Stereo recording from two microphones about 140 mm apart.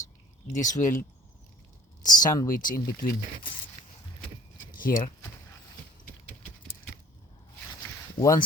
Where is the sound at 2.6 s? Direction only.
85° left.